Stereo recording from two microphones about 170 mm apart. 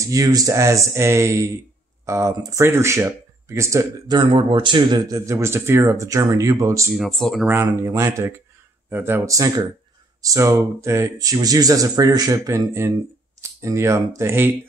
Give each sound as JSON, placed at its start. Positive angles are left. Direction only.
{"t": 0.0, "sound": "speech", "side_deg": -20}
{"t": 4.2, "sound": "speech", "side_deg": -30}
{"t": 7.0, "sound": "speech", "side_deg": 0}
{"t": 7.4, "sound": "speech", "side_deg": -15}